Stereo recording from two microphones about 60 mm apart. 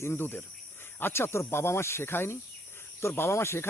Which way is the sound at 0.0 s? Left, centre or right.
Left.